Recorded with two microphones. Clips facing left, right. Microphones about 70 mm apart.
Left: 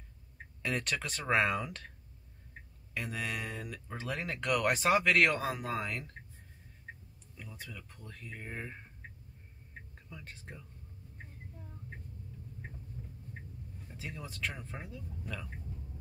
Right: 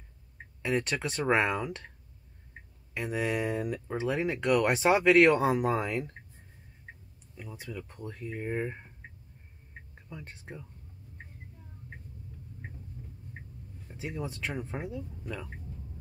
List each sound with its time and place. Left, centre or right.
0.7 s speech: centre
2.9 s speech: centre
7.3 s speech: right
10.0 s speech: centre
13.8 s speech: centre